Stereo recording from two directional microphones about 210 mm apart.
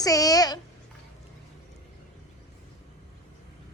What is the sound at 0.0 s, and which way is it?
Speech, 15° left (ahead or behind).